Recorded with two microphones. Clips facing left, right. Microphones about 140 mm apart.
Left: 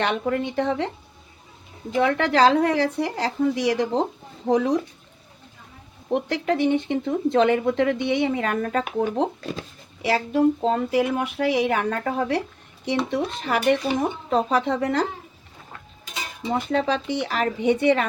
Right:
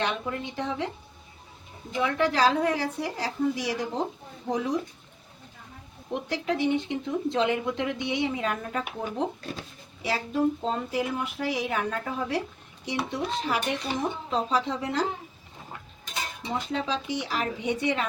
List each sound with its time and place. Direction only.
0.0 s speech: 65° left (ahead or behind)
2.0 s a woman's voice: 75° left (ahead or behind)
4.4 s speech: 65° left (ahead or behind)
6.1 s speech: 60° left (ahead or behind)
13.1 s speech: 60° left (ahead or behind)
16.5 s speech: 60° left (ahead or behind)